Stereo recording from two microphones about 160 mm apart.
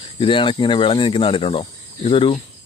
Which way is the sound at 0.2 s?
30° left (ahead or behind).